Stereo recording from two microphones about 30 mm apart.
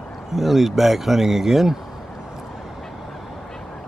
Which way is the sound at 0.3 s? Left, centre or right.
Centre.